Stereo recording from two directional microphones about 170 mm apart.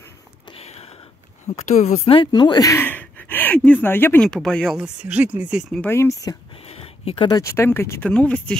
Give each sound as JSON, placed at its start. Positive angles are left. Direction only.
{"t": 0.5, "sound": "a sound", "side_deg": 35}
{"t": 1.6, "sound": "speech", "side_deg": 40}
{"t": 4.8, "sound": "speech", "side_deg": -5}
{"t": 5.8, "sound": "speech", "side_deg": 15}
{"t": 6.6, "sound": "a sound", "side_deg": 35}
{"t": 7.2, "sound": "speech", "side_deg": 20}